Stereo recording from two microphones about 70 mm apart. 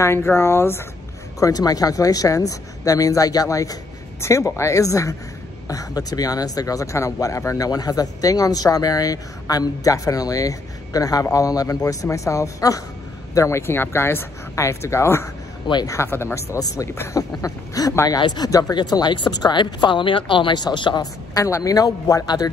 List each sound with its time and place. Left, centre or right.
0.0 s speech: left
1.4 s speech: left
4.2 s speech: left
13.6 s speech: left
16.5 s speech: left
18.0 s speech: left
21.5 s speech: left